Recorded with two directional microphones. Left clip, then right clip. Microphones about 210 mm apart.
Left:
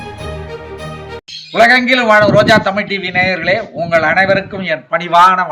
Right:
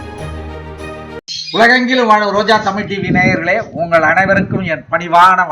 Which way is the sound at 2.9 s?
10° left (ahead or behind).